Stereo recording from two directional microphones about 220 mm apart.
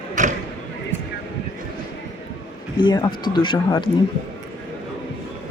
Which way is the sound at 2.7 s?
20° left (ahead or behind).